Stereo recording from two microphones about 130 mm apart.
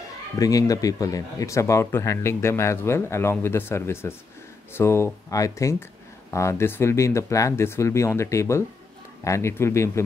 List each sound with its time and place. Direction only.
0.4 s speech: 25° left (ahead or behind)